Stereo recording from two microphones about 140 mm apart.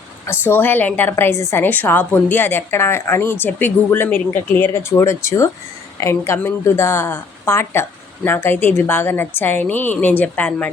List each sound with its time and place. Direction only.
0.3 s a woman's voice: 15° left (ahead or behind)